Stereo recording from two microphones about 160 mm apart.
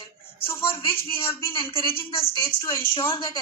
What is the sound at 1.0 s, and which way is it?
A woman's voice, 35° left (ahead or behind).